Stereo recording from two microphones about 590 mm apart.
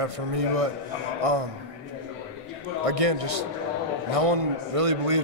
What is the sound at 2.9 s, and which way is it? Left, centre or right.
A man's voice, right.